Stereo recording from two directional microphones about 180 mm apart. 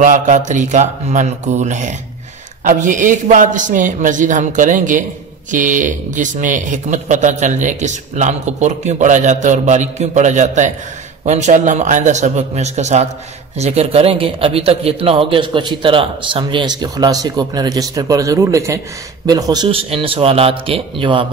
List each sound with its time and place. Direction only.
0.0 s a man's voice: 45° right (ahead or behind); by 21.3 s 30° right (ahead or behind)